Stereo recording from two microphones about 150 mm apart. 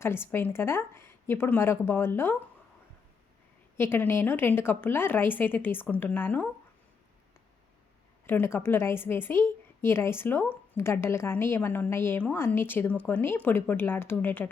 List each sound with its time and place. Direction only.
0.0 s a woman's voice: 15° left (ahead or behind)
3.8 s a woman's voice: 15° left (ahead or behind)
8.3 s a woman's voice: 15° left (ahead or behind)